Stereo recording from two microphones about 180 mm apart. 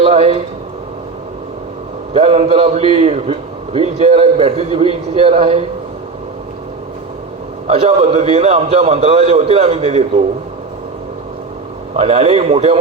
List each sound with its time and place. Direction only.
0.0 s a man's voice: 35° right (ahead or behind)
2.1 s a man's voice: 35° right (ahead or behind)
7.7 s a man's voice: 35° right (ahead or behind)
11.9 s a man's voice: 35° right (ahead or behind)